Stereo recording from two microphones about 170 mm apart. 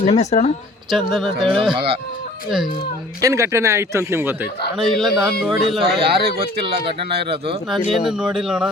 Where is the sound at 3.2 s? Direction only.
20° right (ahead or behind).